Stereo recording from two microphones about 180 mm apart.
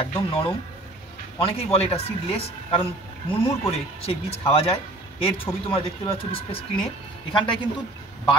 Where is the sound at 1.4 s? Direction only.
30° left (ahead or behind).